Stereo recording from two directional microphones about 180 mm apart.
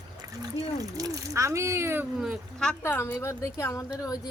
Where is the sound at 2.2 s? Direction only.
Centre (ahead or behind).